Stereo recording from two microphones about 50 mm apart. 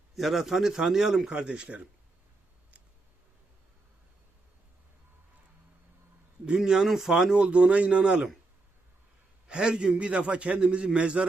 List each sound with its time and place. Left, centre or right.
0.2 s a man's voice: centre
1.3 s a man's voice: centre
6.6 s a man's voice: centre
9.5 s a man's voice: centre